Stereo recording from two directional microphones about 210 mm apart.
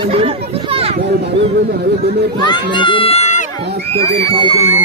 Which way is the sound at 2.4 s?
20° left (ahead or behind).